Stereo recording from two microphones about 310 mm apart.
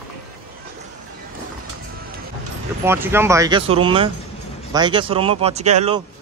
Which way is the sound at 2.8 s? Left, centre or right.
Centre.